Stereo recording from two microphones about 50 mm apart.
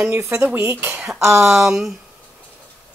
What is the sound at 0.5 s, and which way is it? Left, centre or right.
Speech, right.